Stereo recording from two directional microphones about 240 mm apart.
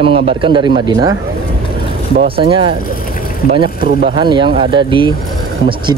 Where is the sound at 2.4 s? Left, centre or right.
Right.